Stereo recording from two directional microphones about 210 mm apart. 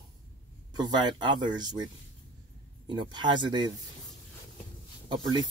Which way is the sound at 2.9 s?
20° right (ahead or behind).